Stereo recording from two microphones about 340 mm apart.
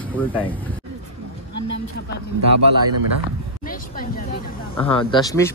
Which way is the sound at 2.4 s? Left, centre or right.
Right.